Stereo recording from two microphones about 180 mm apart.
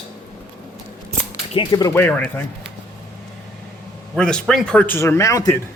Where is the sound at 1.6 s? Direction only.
25° left (ahead or behind).